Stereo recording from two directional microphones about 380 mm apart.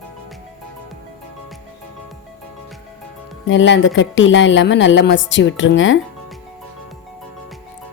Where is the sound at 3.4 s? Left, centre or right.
Left.